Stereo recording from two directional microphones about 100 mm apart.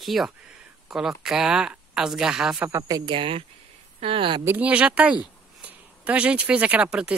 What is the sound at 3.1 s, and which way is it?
Speech, 65° right (ahead or behind).